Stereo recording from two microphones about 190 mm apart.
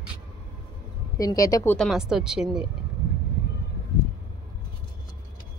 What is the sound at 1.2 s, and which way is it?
Speech, 20° left (ahead or behind).